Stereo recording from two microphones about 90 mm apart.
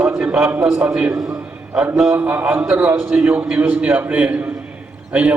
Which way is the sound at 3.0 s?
10° right (ahead or behind).